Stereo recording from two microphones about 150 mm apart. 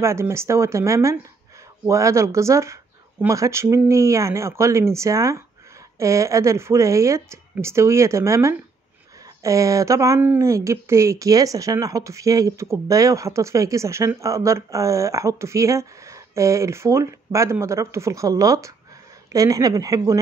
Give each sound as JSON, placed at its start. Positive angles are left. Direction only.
{"t": 0.0, "sound": "speech", "side_deg": -20}